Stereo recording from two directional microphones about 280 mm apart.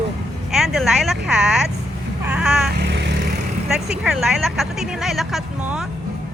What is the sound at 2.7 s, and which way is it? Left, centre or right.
Vehicle, right.